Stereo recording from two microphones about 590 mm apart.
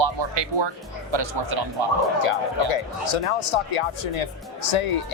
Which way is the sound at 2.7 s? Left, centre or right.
Left.